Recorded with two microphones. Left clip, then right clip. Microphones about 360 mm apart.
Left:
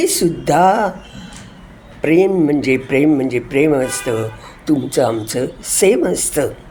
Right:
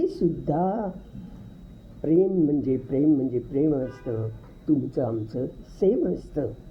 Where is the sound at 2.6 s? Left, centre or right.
Centre.